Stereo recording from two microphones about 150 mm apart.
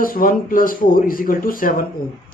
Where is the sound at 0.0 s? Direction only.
70° left (ahead or behind).